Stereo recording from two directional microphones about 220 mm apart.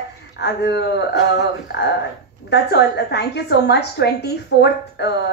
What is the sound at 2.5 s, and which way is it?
A woman's voice, 50° left (ahead or behind).